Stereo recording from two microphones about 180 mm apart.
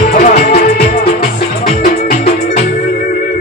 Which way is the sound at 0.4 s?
50° left (ahead or behind).